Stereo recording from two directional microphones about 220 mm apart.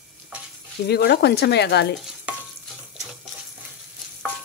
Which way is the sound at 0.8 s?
45° left (ahead or behind).